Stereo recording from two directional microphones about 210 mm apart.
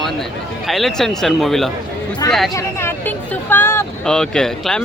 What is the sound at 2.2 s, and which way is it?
Speech, 15° left (ahead or behind).